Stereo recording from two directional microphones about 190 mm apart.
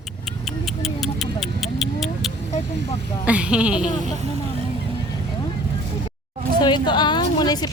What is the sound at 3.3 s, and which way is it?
Speech, 5° right (ahead or behind).